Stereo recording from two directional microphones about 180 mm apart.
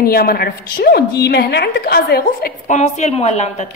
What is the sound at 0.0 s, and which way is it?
A woman's voice, 55° left (ahead or behind).